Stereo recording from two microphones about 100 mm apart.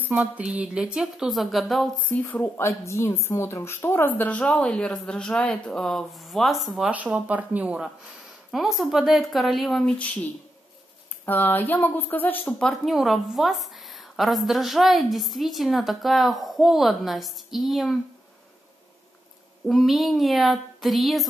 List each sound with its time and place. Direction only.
0.0 s speech: 15° right (ahead or behind)
2.0 s a woman's voice: 15° left (ahead or behind); by 6.9 s centre (ahead or behind)
6.9 s speech: 15° right (ahead or behind)
8.5 s a woman's voice: centre (ahead or behind)
9.8 s a woman's voice: 15° left (ahead or behind)
11.2 s speech: 20° left (ahead or behind)
12.5 s a woman's voice: centre (ahead or behind)
19.7 s a woman's voice: centre (ahead or behind)